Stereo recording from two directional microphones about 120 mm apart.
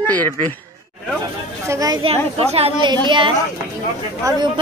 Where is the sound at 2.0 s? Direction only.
55° right (ahead or behind).